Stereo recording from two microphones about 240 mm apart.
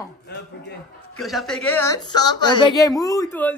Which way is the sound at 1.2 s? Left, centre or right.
Centre.